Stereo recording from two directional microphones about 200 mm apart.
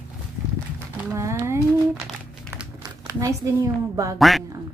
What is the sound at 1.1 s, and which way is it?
Speech, 15° right (ahead or behind).